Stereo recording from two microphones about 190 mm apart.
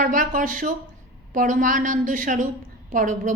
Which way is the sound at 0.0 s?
45° right (ahead or behind).